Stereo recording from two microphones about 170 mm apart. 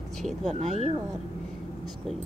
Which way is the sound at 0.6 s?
40° right (ahead or behind).